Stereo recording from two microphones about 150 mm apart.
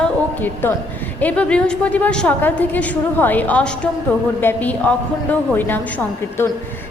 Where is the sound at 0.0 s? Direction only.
10° left (ahead or behind).